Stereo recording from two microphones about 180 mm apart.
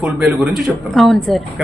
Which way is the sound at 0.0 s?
5° right (ahead or behind).